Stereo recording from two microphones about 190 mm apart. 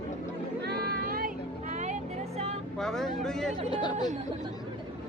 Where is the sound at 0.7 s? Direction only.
55° right (ahead or behind).